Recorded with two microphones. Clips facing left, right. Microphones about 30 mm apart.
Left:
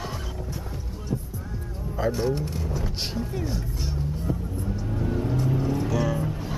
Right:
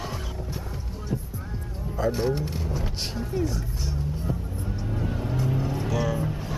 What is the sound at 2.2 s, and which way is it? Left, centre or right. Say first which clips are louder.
Speech: even; centre.